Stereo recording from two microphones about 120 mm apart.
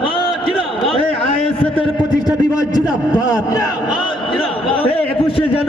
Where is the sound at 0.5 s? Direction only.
Centre (ahead or behind).